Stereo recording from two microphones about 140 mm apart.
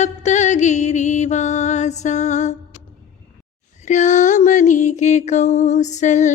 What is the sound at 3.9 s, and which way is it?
Music, 60° left (ahead or behind).